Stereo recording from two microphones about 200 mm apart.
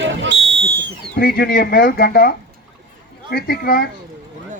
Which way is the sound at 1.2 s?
50° left (ahead or behind).